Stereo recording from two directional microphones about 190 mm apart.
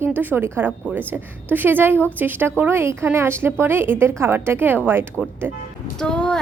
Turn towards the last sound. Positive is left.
turn(degrees=5)  # may be behind; listen again after turning